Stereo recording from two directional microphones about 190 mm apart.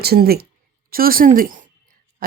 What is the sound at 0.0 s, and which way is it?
A woman's voice, 55° right (ahead or behind).